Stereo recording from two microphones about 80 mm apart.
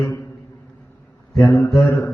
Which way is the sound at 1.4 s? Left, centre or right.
Left.